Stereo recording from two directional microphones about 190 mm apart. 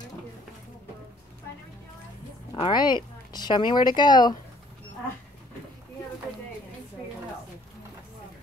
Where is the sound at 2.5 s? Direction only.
25° left (ahead or behind).